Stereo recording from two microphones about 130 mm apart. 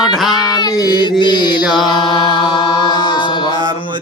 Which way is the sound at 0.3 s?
35° left (ahead or behind).